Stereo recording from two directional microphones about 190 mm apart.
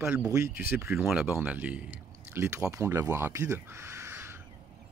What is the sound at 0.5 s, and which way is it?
Speech, 50° left (ahead or behind).